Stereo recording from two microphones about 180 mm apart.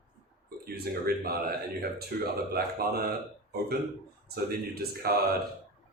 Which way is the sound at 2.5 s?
60° right (ahead or behind).